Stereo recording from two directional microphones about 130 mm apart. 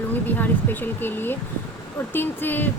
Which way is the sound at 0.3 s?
15° left (ahead or behind).